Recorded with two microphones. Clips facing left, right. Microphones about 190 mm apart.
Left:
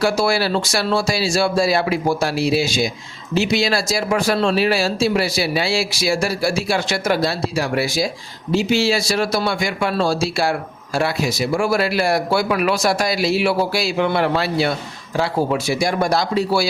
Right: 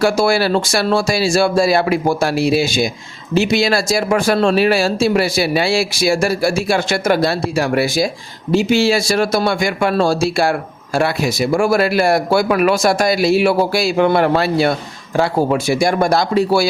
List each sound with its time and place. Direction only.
0.0 s speech: 50° right (ahead or behind)